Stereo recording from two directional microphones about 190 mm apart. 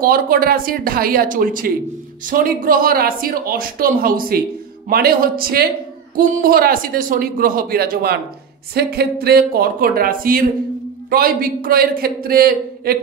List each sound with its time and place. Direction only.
0.0 s speech: 50° right (ahead or behind)